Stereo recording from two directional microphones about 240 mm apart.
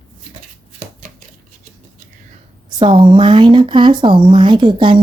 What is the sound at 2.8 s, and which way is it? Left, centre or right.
Speech, centre.